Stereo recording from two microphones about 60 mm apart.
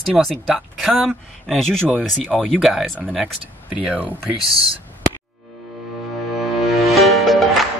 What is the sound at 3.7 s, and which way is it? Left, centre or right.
Speech, right.